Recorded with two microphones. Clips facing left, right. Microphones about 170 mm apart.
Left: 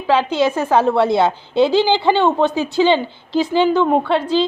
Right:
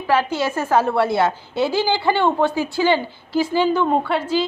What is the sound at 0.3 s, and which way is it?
A woman's voice, 20° left (ahead or behind).